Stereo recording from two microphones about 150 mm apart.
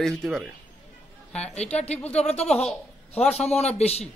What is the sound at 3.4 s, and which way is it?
Speech, 45° left (ahead or behind).